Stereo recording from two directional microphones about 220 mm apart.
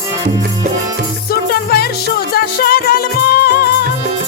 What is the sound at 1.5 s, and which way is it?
Music, 45° left (ahead or behind).